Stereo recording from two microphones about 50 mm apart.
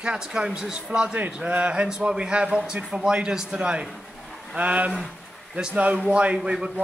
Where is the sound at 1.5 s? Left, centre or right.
Right.